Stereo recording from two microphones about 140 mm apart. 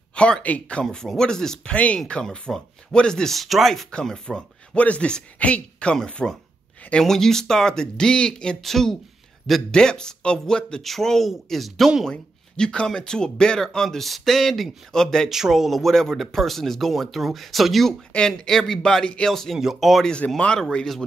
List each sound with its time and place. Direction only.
0.1 s a man's voice: 10° left (ahead or behind)